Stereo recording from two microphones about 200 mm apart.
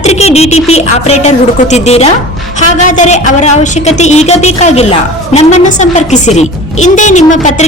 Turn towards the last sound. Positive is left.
turn(degrees=40)  # may be behind; listen again after turning